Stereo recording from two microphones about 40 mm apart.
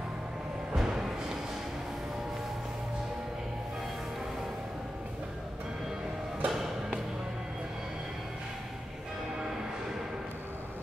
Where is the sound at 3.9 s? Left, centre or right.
Centre.